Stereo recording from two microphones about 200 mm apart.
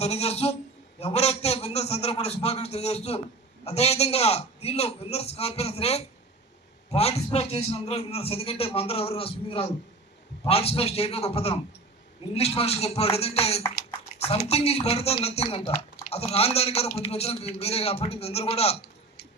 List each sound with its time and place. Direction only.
0.0 s a man's voice: 30° left (ahead or behind)